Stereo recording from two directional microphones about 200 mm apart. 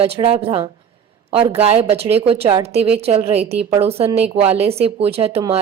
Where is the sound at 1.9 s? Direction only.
30° right (ahead or behind).